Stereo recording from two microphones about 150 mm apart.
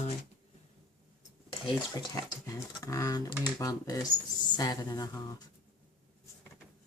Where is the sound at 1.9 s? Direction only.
25° left (ahead or behind).